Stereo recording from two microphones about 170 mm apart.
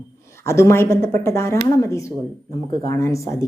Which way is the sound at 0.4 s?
15° left (ahead or behind).